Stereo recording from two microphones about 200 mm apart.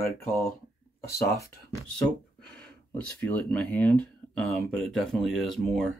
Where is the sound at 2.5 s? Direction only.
5° left (ahead or behind).